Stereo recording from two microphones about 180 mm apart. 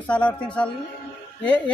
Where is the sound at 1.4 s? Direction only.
5° left (ahead or behind).